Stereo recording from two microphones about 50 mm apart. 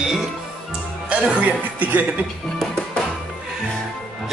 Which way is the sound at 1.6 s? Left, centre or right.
Right.